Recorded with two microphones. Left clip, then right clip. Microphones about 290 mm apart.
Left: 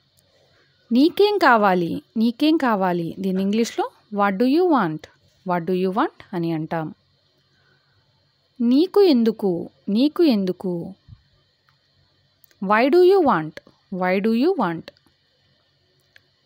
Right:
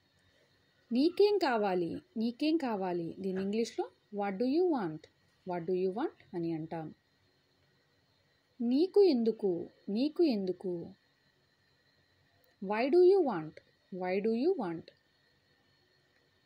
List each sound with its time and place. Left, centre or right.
0.9 s a woman's voice: left
8.6 s a woman's voice: left
12.6 s a woman's voice: left